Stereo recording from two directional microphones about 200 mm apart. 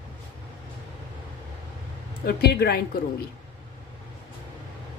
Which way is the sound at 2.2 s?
50° left (ahead or behind).